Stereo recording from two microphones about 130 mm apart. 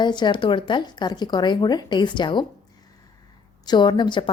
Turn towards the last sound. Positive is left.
turn(degrees=35)  # may be behind; listen again after turning